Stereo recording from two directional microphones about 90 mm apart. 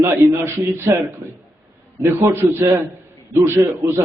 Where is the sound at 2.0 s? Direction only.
30° right (ahead or behind).